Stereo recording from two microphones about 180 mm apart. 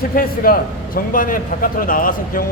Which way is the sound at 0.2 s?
55° left (ahead or behind).